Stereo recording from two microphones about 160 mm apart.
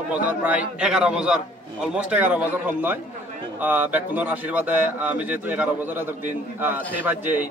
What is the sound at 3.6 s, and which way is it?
Speech, 10° right (ahead or behind).